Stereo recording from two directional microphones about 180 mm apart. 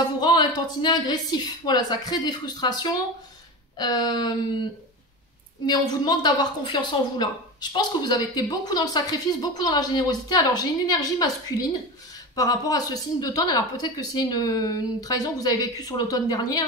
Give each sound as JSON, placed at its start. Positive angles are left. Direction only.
{"t": 0.2, "sound": "a sound", "side_deg": 25}
{"t": 0.8, "sound": "a woman's voice", "side_deg": 25}
{"t": 5.7, "sound": "a woman's voice", "side_deg": 20}